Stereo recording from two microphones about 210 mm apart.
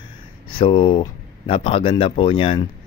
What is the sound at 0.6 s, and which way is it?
Speech, 25° left (ahead or behind).